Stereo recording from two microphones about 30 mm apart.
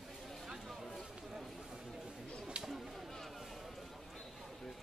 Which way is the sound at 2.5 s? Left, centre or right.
Right.